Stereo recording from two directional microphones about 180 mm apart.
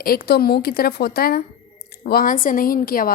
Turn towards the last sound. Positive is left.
turn(degrees=55)  # may be behind; listen again after turning